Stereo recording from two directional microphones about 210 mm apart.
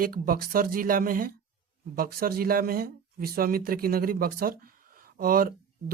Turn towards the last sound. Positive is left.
turn(degrees=-45)  # may be behind; listen again after turning